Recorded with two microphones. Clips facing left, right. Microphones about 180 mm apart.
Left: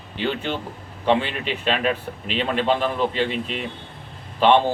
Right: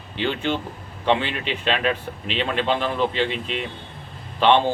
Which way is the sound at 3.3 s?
45° left (ahead or behind).